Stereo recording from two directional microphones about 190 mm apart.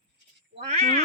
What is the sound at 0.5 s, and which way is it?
Speech, 35° right (ahead or behind).